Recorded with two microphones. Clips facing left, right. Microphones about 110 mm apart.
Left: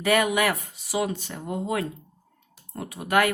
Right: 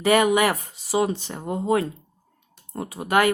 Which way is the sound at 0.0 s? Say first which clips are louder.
Right 4 dB; 25° right (ahead or behind).